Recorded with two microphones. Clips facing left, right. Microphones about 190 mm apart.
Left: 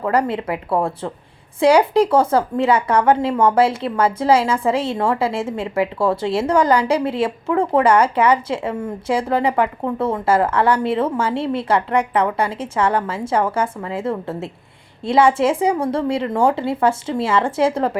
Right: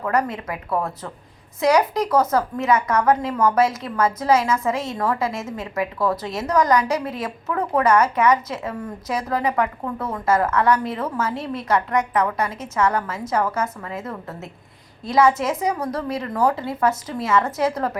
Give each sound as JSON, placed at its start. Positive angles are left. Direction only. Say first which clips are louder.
{"t": 0.0, "sound": "a woman's voice", "louder": "left 4 dB", "side_deg": 30}